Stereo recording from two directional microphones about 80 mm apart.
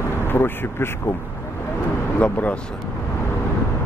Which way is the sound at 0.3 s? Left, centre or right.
Left.